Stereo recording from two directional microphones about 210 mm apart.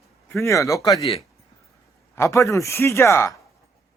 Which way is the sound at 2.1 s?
15° left (ahead or behind).